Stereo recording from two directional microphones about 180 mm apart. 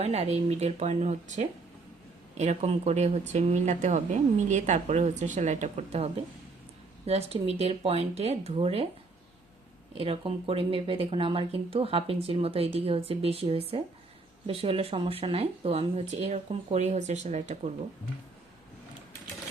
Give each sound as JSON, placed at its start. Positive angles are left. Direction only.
{"t": 0.0, "sound": "speech", "side_deg": -35}
{"t": 9.9, "sound": "speech", "side_deg": -30}